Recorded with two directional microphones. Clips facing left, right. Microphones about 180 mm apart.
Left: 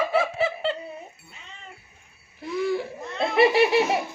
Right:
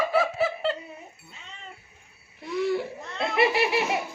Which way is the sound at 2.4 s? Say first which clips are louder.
Even; centre (ahead or behind).